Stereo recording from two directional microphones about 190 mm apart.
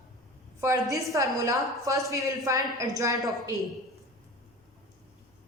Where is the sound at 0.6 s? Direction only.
15° right (ahead or behind).